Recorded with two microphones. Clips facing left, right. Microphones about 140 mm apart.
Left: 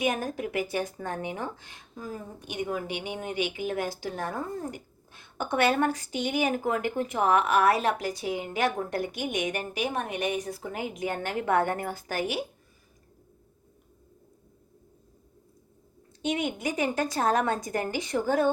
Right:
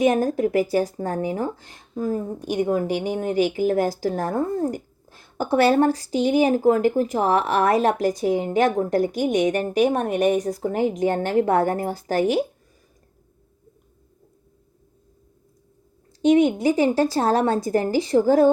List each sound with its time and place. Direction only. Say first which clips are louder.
0.0 s speech: right 10 dB; 35° right (ahead or behind)
16.2 s speech: right 12 dB; 35° right (ahead or behind)